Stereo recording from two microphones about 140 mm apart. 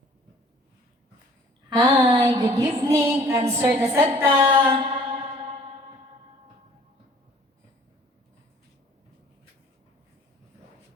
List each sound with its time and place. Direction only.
1.7 s music: 35° right (ahead or behind)
4.2 s a sound: 15° right (ahead or behind)
4.7 s mantra: 35° right (ahead or behind)